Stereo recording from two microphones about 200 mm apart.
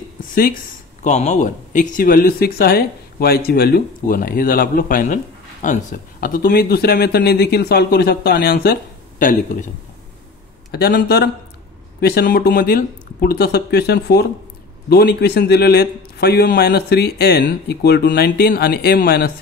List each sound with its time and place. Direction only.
0.2 s a sound: 45° left (ahead or behind)
1.0 s speech: 35° left (ahead or behind); by 8.7 s 50° left (ahead or behind)
9.2 s a man's voice: 40° left (ahead or behind)
10.7 s speech: 50° left (ahead or behind)